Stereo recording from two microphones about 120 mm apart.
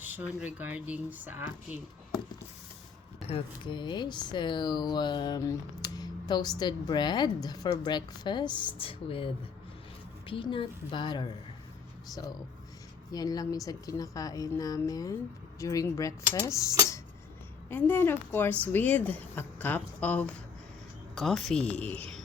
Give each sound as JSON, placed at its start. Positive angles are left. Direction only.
{"t": 0.0, "sound": "speech", "side_deg": -15}
{"t": 3.2, "sound": "a woman's voice", "side_deg": 45}
{"t": 17.7, "sound": "a woman's voice", "side_deg": 15}